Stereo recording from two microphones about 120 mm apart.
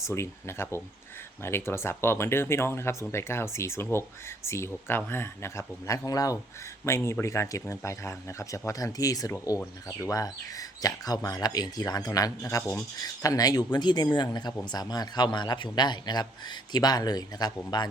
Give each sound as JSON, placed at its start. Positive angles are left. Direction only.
{"t": 0.1, "sound": "speech", "side_deg": 20}